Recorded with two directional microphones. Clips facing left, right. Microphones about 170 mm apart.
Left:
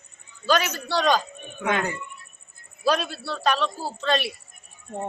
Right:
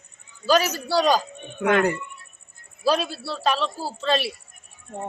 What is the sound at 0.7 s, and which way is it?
Speech, 10° right (ahead or behind).